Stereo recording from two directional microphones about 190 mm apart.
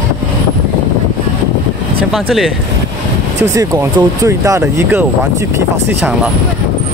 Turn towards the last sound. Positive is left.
turn(degrees=-5)  # may be behind; listen again after turning